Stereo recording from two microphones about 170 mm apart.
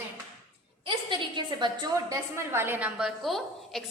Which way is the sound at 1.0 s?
25° right (ahead or behind).